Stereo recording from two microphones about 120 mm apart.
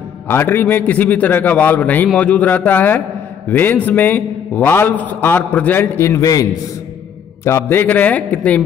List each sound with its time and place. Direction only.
0.3 s a man's voice: 20° left (ahead or behind)